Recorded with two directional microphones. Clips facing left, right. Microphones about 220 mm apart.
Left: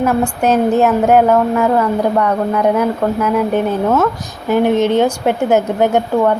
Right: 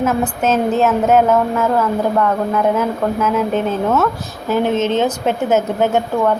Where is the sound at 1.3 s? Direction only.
Centre (ahead or behind).